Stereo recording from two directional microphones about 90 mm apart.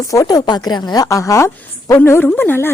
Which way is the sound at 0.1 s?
40° left (ahead or behind).